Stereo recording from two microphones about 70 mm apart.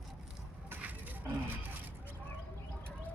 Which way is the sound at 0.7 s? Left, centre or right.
Right.